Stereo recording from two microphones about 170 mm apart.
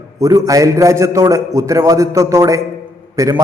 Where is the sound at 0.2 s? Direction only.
20° right (ahead or behind).